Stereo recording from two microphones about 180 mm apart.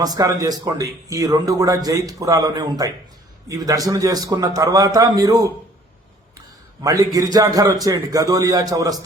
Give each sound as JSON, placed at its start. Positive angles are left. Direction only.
{"t": 0.0, "sound": "speech", "side_deg": -20}
{"t": 6.8, "sound": "speech", "side_deg": -20}